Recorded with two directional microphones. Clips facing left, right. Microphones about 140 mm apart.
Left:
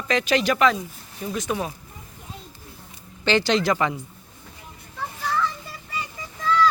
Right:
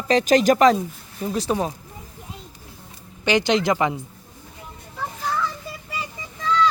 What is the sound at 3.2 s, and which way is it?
Speech, 15° right (ahead or behind).